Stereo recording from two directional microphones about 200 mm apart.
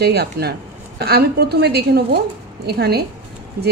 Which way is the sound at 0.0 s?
55° right (ahead or behind).